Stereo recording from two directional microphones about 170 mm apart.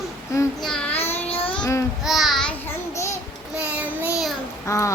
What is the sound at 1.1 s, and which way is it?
Child singing, 35° left (ahead or behind).